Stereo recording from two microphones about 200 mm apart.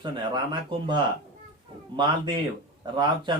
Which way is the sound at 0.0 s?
25° right (ahead or behind).